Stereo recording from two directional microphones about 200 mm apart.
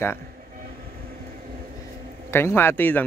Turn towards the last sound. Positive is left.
turn(degrees=10)  # may be behind; listen again after turning